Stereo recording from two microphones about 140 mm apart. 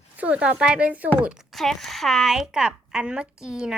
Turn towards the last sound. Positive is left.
turn(degrees=-5)  # may be behind; listen again after turning